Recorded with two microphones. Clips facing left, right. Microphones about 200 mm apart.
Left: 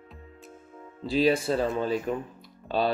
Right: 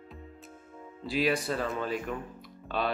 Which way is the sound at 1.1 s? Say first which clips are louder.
Left 5 dB; 25° left (ahead or behind).